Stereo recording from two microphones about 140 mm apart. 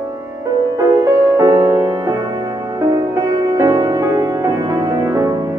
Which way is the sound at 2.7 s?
25° right (ahead or behind).